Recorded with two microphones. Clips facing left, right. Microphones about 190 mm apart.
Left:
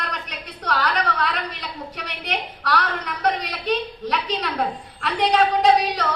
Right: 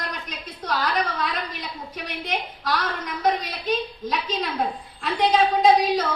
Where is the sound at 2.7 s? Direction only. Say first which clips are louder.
Left 3 dB; 75° left (ahead or behind).